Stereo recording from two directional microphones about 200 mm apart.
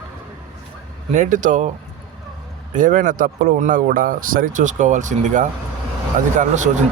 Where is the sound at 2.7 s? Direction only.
40° right (ahead or behind).